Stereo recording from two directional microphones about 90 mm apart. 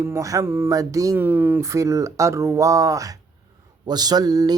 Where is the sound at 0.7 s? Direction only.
40° right (ahead or behind).